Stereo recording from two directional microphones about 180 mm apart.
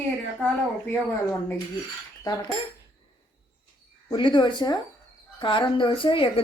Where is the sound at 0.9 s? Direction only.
10° left (ahead or behind).